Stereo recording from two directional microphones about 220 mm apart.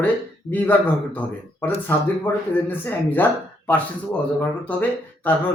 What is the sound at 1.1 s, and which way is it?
Speech, 10° left (ahead or behind).